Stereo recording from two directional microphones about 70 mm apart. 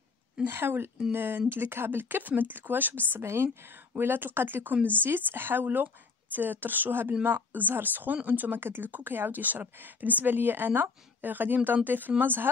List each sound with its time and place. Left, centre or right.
0.4 s speech: right
3.1 s speech: right